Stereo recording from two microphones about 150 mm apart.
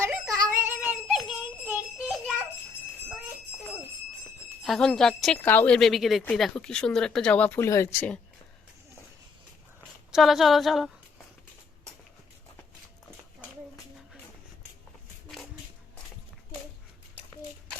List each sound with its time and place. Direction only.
0.0 s music: 20° right (ahead or behind)
0.7 s music: 5° right (ahead or behind)
4.6 s speech: centre (ahead or behind)
10.1 s speech: centre (ahead or behind)